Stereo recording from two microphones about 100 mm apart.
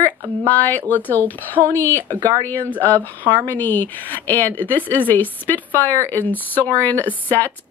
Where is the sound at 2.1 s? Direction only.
45° right (ahead or behind).